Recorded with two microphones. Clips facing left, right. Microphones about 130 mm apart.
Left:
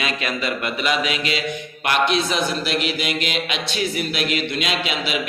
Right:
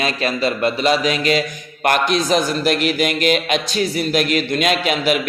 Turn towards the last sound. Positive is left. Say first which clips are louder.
# right 6 dB
turn(degrees=-45)  # may be behind; listen again after turning